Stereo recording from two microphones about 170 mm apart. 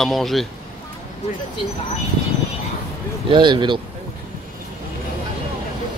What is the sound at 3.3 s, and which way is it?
Speech, 25° right (ahead or behind).